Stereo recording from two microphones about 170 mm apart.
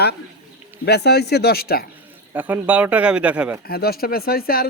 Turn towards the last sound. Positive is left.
turn(degrees=60)  # may be behind; listen again after turning